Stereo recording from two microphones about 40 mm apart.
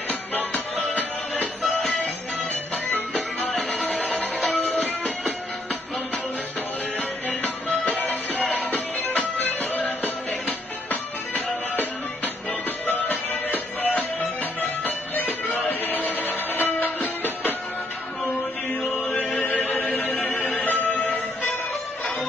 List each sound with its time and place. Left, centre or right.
0.1 s music: left
3.7 s music: left
7.4 s music: left
18.8 s music: left